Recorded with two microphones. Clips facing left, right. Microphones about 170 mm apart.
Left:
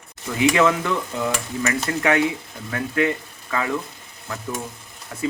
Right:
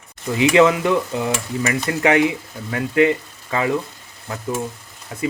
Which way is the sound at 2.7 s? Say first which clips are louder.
Right 5 dB; 20° right (ahead or behind).